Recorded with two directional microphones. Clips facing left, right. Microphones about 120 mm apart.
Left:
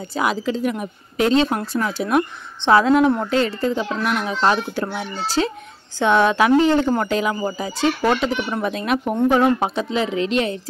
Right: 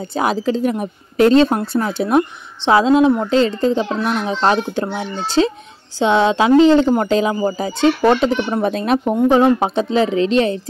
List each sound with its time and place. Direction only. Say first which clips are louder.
0.0 s a woman's voice: right 3 dB; 30° right (ahead or behind)